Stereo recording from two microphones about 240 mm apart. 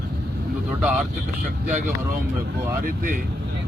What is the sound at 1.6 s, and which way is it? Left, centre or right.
Speech, right.